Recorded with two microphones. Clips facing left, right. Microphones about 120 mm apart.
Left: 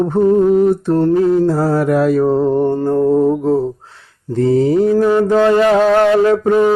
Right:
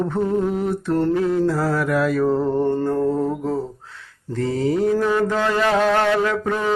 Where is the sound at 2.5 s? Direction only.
15° left (ahead or behind).